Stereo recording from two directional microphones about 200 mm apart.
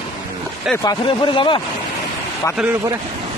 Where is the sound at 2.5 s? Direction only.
10° right (ahead or behind).